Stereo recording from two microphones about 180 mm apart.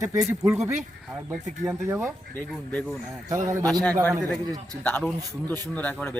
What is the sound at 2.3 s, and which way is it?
Speech, 5° left (ahead or behind).